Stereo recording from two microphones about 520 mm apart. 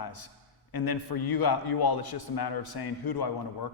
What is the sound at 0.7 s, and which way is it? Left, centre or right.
A man's voice, left.